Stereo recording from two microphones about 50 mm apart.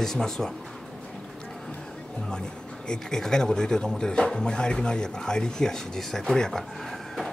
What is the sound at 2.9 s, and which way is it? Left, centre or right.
Speech, centre.